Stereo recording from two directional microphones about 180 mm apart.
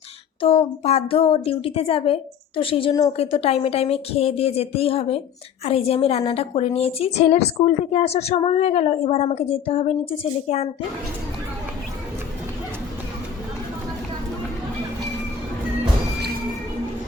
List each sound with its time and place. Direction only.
0.4 s a woman's voice: 30° left (ahead or behind)